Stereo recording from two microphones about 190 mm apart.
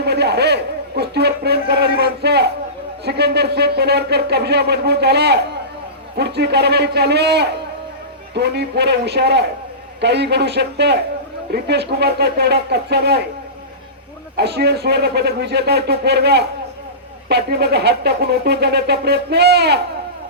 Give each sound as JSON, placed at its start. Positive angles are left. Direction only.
{"t": 0.0, "sound": "a sound", "side_deg": -60}
{"t": 3.0, "sound": "speech", "side_deg": -60}
{"t": 14.3, "sound": "speech", "side_deg": -60}